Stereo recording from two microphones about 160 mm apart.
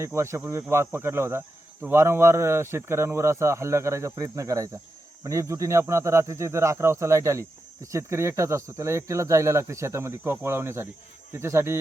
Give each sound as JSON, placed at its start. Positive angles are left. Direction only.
{"t": 0.0, "sound": "speech", "side_deg": -15}